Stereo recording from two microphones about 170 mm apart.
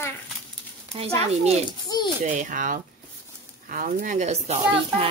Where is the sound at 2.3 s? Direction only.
50° right (ahead or behind).